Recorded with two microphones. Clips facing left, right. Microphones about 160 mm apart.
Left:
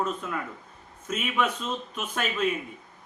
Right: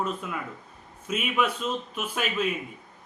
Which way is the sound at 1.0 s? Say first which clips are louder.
Right 1 dB; 5° right (ahead or behind).